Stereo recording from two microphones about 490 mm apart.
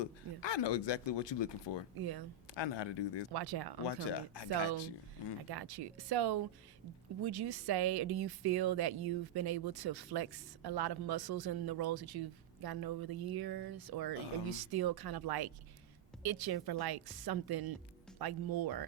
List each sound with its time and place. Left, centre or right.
0.0 s speech: left
2.0 s speech: right
2.6 s speech: left
3.3 s speech: right
3.8 s speech: left
5.5 s speech: right